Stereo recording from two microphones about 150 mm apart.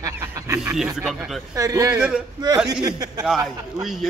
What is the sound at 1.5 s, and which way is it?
Speech, 20° right (ahead or behind).